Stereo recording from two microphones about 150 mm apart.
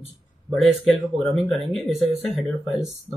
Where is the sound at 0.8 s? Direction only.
Centre (ahead or behind).